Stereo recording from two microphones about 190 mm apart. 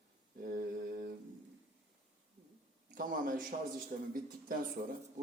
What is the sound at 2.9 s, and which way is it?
A man's voice, 45° right (ahead or behind).